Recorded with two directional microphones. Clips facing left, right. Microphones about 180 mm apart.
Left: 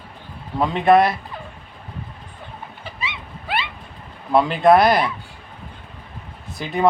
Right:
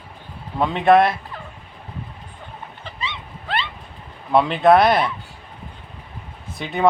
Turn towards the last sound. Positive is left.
turn(degrees=0)  # may be behind; listen again after turning